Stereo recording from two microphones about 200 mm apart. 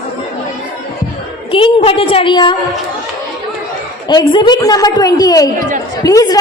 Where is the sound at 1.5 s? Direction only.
25° left (ahead or behind).